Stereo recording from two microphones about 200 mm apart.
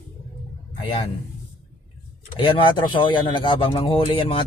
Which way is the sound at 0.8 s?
25° left (ahead or behind).